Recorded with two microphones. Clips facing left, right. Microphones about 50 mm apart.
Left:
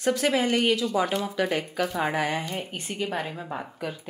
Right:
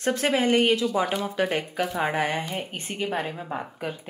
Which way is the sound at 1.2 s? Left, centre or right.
Right.